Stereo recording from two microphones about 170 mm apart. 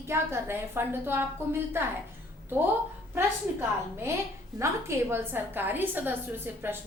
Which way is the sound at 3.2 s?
15° right (ahead or behind).